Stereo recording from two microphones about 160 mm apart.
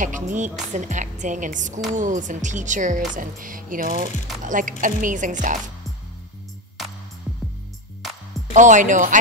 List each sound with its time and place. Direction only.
0.0 s a woman's voice: 50° right (ahead or behind)
8.5 s a woman's voice: 50° right (ahead or behind)